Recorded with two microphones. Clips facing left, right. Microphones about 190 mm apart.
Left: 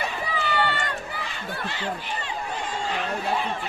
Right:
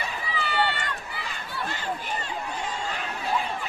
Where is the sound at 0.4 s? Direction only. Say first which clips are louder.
Left 1 dB; 45° left (ahead or behind).